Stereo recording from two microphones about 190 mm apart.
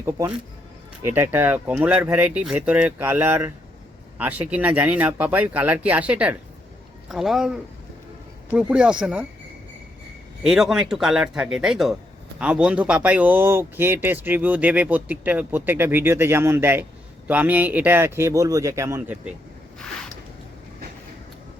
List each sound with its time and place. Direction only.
0.0 s speech: 15° right (ahead or behind)
10.4 s speech: centre (ahead or behind)